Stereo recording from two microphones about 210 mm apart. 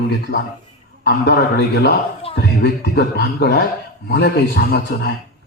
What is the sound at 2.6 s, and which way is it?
A man's voice, 50° left (ahead or behind).